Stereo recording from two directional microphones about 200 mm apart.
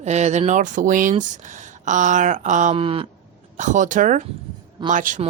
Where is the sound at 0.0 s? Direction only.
35° right (ahead or behind).